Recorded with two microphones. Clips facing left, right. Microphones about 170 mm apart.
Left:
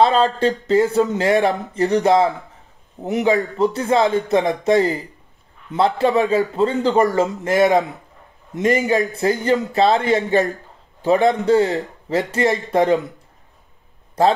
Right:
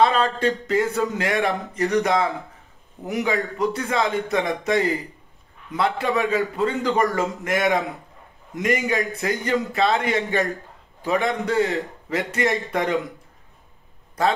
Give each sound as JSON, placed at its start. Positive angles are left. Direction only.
{"t": 0.0, "sound": "a man's voice", "side_deg": 30}